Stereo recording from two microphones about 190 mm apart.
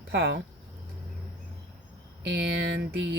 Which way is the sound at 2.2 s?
70° right (ahead or behind).